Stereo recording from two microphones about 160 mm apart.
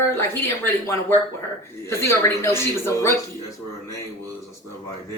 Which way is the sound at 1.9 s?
15° left (ahead or behind).